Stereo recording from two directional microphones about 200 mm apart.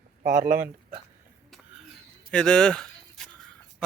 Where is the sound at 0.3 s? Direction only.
45° right (ahead or behind).